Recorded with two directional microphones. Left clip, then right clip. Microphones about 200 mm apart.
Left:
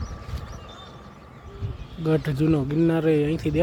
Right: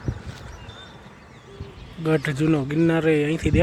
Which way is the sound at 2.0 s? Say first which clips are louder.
Right 1 dB; centre (ahead or behind).